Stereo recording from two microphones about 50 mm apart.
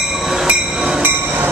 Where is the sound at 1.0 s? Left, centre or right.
Right.